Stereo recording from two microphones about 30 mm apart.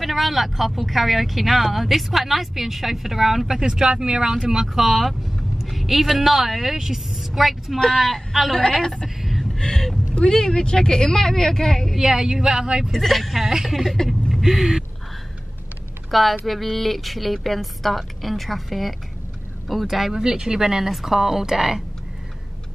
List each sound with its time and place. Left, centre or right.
0.0 s speech: centre
3.5 s speech: right
4.7 s a woman's voice: centre
9.2 s a sound: centre
9.6 s speech: centre
12.0 s speech: centre
12.9 s speech: centre
13.5 s speech: centre
14.4 s a sound: centre
16.1 s speech: centre